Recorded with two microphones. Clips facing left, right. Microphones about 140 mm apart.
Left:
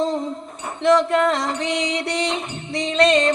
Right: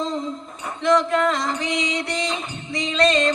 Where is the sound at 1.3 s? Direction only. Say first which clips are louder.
Left 2 dB; 65° left (ahead or behind).